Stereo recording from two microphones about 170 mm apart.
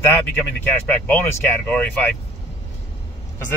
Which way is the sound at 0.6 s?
10° left (ahead or behind).